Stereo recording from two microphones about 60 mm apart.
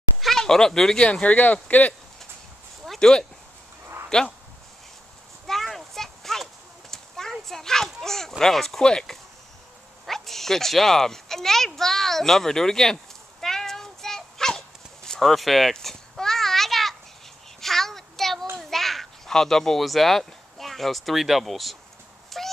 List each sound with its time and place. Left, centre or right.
0.2 s speech: centre; by 2.0 s left
3.0 s speech: centre
3.8 s dog: right
5.5 s a sound: centre
17.6 s child singing: centre
18.6 s speech: centre
22.3 s a sound: centre